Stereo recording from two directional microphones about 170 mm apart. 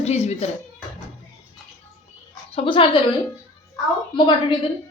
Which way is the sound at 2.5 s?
35° left (ahead or behind).